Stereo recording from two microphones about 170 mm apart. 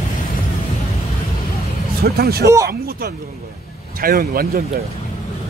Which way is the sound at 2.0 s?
65° right (ahead or behind).